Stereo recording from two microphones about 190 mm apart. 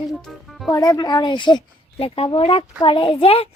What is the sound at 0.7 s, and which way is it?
Speech, 20° left (ahead or behind).